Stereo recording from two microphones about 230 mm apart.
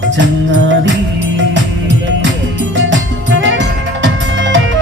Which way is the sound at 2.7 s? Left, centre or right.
Right.